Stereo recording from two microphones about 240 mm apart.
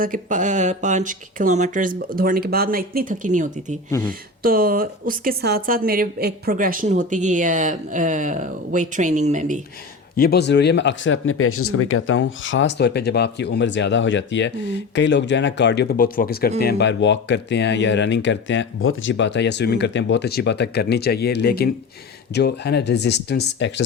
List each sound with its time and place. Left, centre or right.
0.0 s speech: right
10.2 s speech: left